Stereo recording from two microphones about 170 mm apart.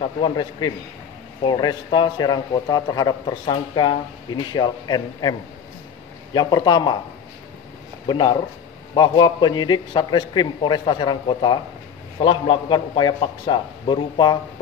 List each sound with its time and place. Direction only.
0.0 s a man's voice: 25° left (ahead or behind)
6.3 s a man's voice: 25° left (ahead or behind)
8.1 s a man's voice: 25° left (ahead or behind)